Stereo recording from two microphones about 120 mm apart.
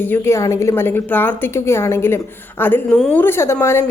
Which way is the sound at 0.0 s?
20° left (ahead or behind).